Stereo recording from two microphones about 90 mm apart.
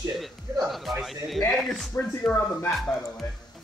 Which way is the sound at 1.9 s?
25° left (ahead or behind).